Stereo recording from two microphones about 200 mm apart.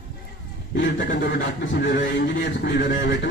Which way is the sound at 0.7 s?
65° left (ahead or behind).